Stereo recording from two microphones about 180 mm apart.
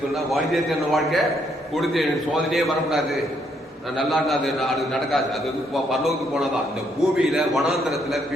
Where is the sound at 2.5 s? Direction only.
Centre (ahead or behind).